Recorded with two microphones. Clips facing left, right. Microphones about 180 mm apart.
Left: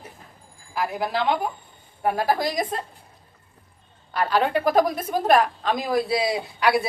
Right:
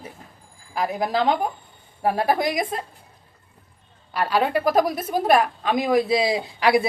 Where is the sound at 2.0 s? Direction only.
25° right (ahead or behind).